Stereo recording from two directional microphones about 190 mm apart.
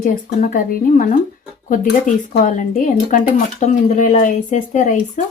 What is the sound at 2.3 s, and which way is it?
Speech, 45° left (ahead or behind).